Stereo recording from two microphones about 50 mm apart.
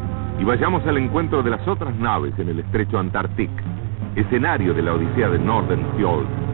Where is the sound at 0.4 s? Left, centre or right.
Left.